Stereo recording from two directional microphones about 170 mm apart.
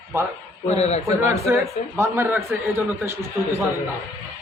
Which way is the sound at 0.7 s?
40° left (ahead or behind).